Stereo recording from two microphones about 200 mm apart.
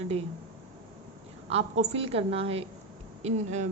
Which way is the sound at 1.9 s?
30° right (ahead or behind).